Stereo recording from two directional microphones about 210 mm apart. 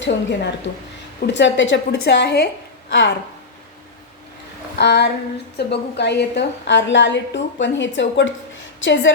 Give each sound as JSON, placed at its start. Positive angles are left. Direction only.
{"t": 0.0, "sound": "a woman's voice", "side_deg": 60}
{"t": 2.9, "sound": "a woman's voice", "side_deg": 60}
{"t": 4.8, "sound": "a sound", "side_deg": 55}
{"t": 5.5, "sound": "a woman's voice", "side_deg": 55}